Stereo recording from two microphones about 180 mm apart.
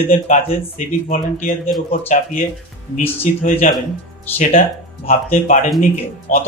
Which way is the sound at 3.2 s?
40° left (ahead or behind).